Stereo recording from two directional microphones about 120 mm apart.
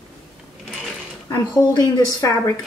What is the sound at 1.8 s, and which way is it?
Speech, 25° left (ahead or behind).